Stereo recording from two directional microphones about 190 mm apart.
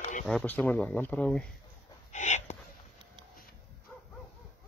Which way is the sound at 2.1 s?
40° left (ahead or behind).